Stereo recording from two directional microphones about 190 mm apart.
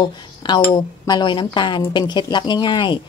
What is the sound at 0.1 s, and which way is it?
A woman's voice, 25° left (ahead or behind).